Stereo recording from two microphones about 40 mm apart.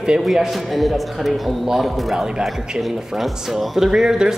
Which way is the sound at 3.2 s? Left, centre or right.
Centre.